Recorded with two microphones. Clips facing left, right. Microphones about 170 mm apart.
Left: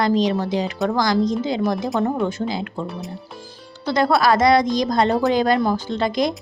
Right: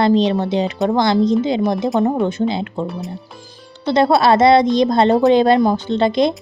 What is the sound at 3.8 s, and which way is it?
A woman's voice, 25° right (ahead or behind).